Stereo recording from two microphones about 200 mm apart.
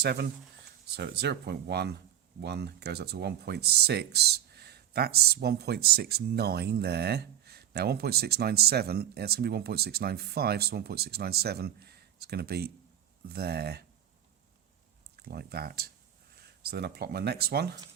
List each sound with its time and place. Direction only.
0.0 s speech: 55° right (ahead or behind)
15.1 s speech: 50° right (ahead or behind)